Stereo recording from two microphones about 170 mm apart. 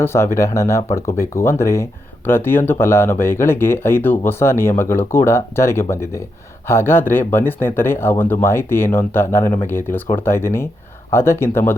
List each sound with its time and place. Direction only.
0.0 s speech: 15° left (ahead or behind)